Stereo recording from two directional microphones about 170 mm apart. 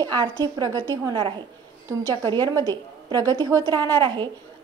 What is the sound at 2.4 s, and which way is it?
A woman's voice, 25° right (ahead or behind).